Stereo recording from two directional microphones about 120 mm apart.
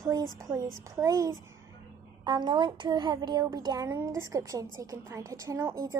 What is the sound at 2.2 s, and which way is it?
A woman's voice, 40° right (ahead or behind).